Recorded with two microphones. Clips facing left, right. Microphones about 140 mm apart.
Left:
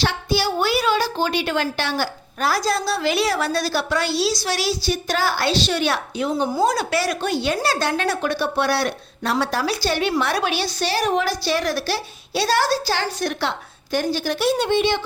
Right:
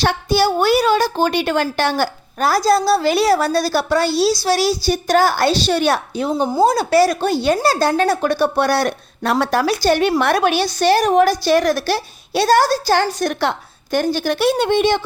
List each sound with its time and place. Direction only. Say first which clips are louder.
0.0 s a woman's voice: right 5 dB; 45° right (ahead or behind)